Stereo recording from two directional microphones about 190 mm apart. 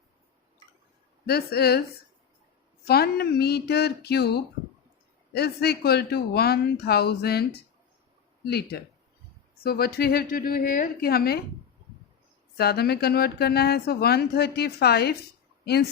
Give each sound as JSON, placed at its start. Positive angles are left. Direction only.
{"t": 1.3, "sound": "speech", "side_deg": 55}
{"t": 2.8, "sound": "a woman's voice", "side_deg": 55}
{"t": 12.5, "sound": "speech", "side_deg": 55}